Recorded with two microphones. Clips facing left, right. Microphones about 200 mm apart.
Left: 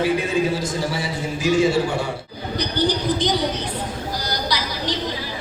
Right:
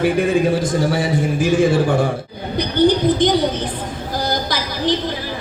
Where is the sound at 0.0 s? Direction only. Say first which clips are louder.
Right 4 dB; 55° right (ahead or behind).